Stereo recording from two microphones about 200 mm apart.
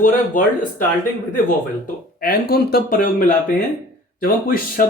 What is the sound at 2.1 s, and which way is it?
Speech, 50° left (ahead or behind).